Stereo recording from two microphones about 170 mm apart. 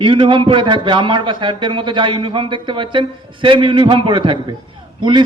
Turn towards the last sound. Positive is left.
turn(degrees=-25)  # may be behind; listen again after turning